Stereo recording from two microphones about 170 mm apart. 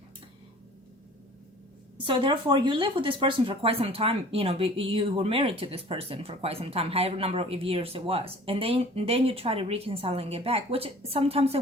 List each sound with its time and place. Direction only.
2.0 s speech: 30° right (ahead or behind)